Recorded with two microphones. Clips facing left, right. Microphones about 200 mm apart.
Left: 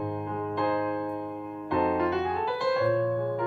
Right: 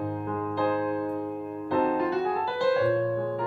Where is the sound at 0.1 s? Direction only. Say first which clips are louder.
Right 1 dB; 20° left (ahead or behind).